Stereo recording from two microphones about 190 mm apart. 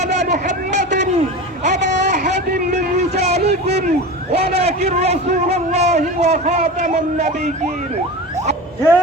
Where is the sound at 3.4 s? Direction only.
60° right (ahead or behind).